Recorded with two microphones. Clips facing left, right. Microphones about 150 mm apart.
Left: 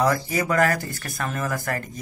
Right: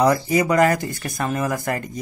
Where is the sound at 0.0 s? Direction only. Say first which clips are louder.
Right 5 dB; 15° right (ahead or behind).